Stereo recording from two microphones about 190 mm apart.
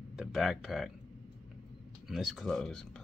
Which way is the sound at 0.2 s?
Centre (ahead or behind).